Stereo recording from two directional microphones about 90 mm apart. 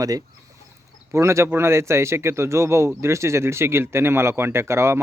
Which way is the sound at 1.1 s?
30° right (ahead or behind).